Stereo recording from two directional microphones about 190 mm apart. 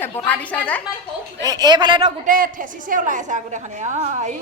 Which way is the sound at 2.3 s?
45° right (ahead or behind).